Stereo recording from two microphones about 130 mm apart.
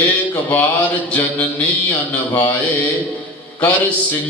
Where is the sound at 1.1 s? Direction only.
15° left (ahead or behind).